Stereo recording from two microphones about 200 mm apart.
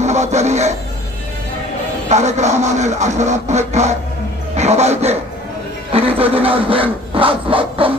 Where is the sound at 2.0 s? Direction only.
35° right (ahead or behind).